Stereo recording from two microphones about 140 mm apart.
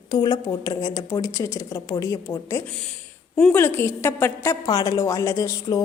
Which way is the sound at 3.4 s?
10° left (ahead or behind).